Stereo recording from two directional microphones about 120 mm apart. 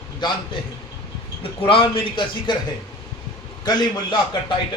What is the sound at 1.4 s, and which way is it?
Speech, 50° left (ahead or behind).